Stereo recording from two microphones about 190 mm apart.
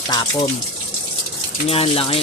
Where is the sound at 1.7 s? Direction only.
30° left (ahead or behind).